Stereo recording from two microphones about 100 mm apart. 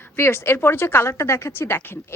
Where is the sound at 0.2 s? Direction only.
25° left (ahead or behind).